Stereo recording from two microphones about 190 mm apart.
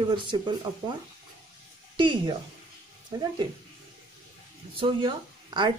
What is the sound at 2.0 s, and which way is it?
Speech, 25° right (ahead or behind).